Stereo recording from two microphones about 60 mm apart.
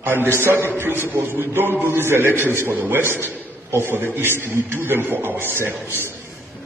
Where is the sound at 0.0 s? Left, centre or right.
Right.